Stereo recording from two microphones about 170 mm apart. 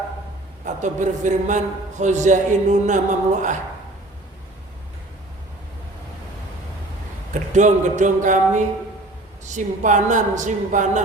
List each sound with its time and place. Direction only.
0.6 s a man's voice: 45° right (ahead or behind)
7.5 s a man's voice: 45° right (ahead or behind)